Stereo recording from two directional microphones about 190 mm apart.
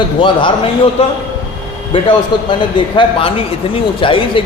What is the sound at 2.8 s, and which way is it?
Speech, 25° left (ahead or behind).